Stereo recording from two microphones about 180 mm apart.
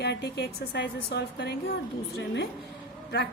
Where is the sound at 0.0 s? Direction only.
65° left (ahead or behind).